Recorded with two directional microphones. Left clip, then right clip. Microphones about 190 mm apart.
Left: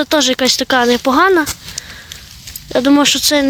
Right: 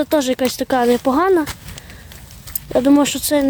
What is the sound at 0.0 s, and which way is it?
Speech, centre (ahead or behind).